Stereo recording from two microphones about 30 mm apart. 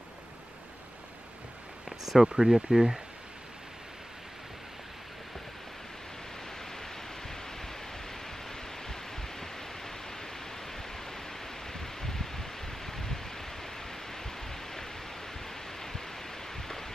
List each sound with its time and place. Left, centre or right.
1.9 s speech: centre
6.6 s pink noise: centre
15.4 s a sound: centre